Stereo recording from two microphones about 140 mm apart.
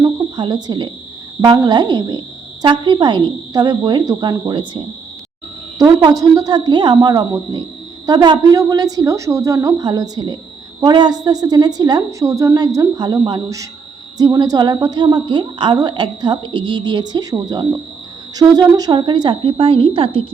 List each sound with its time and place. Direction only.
0.0 s cricket: 30° right (ahead or behind)
1.6 s a woman's voice: 30° right (ahead or behind)
5.8 s a woman's voice: 25° right (ahead or behind)